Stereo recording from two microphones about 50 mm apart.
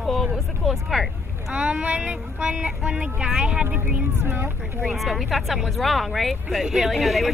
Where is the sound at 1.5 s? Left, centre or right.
Right.